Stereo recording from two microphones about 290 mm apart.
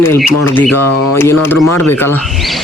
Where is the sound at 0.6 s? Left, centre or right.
Left.